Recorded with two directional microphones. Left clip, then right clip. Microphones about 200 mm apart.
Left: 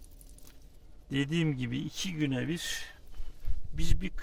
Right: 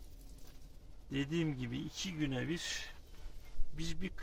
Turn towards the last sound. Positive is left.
turn(degrees=45)  # may be behind; listen again after turning